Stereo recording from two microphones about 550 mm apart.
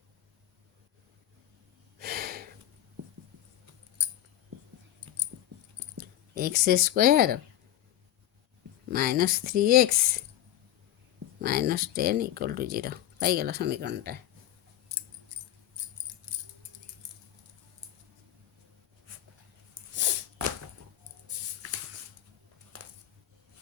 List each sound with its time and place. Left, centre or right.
2.0 s gasp: centre
4.9 s a sound: right
6.0 s speech: centre
8.9 s speech: centre
11.3 s speech: centre
19.9 s sneeze: centre
21.2 s a sound: right